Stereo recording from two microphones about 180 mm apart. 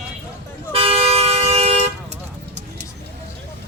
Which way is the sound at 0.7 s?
35° right (ahead or behind).